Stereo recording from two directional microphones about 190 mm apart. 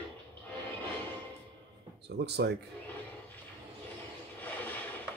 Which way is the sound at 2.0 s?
60° right (ahead or behind).